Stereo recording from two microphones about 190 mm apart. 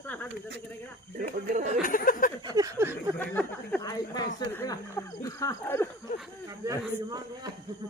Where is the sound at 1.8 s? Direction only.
45° left (ahead or behind).